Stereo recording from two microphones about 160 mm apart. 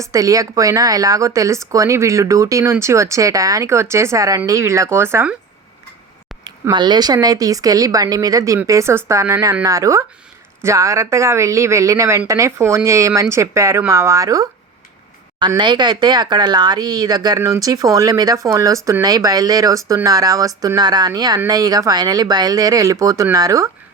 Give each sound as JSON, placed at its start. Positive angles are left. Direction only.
{"t": 0.0, "sound": "speech", "side_deg": -20}
{"t": 6.4, "sound": "speech", "side_deg": -25}